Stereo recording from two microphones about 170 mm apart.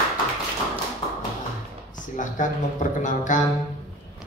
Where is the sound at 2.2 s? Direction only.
50° left (ahead or behind).